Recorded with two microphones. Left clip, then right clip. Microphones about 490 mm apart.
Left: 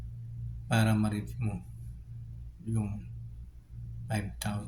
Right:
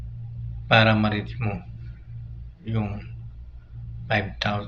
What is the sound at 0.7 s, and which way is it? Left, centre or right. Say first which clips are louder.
Speech: right 13 dB; left.